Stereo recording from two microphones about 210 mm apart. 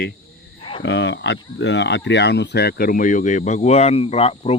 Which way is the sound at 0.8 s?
55° left (ahead or behind).